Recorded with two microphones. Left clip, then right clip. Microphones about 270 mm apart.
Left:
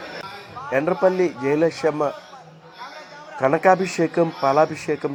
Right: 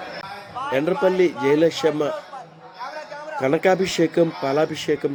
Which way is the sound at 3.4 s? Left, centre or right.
Centre.